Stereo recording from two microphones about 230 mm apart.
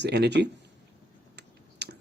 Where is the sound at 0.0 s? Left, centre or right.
Right.